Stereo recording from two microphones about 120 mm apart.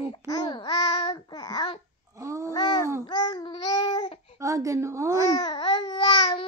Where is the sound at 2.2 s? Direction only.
25° right (ahead or behind).